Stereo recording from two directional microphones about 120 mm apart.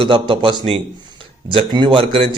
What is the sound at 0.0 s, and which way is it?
Speech, 45° right (ahead or behind).